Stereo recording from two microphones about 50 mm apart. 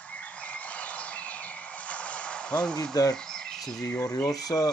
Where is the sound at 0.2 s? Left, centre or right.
Left; by 3.5 s centre.